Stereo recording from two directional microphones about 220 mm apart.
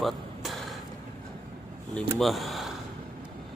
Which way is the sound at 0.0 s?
Centre (ahead or behind).